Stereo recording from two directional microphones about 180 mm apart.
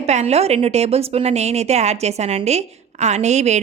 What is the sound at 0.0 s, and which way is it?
A woman's voice, 40° right (ahead or behind).